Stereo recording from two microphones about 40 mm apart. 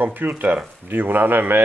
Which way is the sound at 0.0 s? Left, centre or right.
Right.